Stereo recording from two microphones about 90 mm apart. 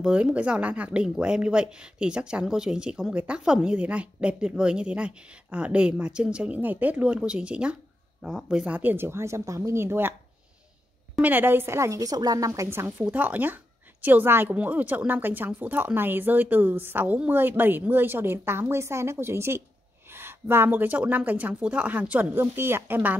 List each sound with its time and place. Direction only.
0.0 s a woman's voice: 10° right (ahead or behind)
11.1 s a woman's voice: 20° right (ahead or behind)